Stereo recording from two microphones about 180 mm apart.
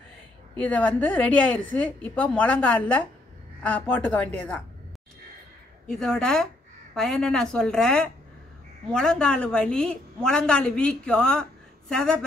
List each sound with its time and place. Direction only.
0.6 s a woman's voice: 10° left (ahead or behind)
5.9 s a woman's voice: 5° left (ahead or behind)